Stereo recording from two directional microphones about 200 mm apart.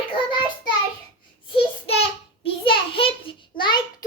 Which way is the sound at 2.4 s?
25° left (ahead or behind).